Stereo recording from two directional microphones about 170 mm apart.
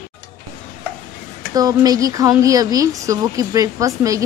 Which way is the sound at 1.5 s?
20° right (ahead or behind).